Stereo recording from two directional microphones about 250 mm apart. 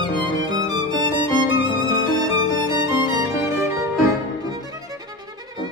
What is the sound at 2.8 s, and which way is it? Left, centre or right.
Music, centre.